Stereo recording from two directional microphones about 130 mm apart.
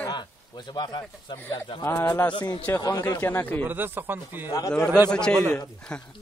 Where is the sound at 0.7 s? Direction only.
35° left (ahead or behind).